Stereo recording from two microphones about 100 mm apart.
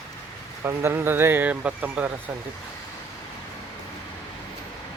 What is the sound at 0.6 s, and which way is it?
A man's voice, 25° right (ahead or behind).